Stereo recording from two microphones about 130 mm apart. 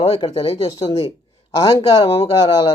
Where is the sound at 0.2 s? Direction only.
45° left (ahead or behind).